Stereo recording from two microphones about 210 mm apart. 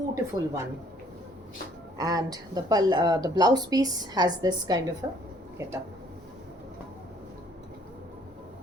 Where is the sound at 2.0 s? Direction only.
15° right (ahead or behind).